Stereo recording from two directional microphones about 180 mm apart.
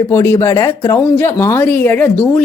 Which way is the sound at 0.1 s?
15° left (ahead or behind).